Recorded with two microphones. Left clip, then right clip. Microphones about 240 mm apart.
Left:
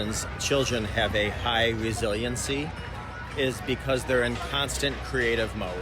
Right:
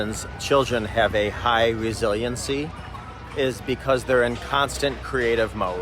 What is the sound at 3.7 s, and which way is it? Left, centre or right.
Speech, centre.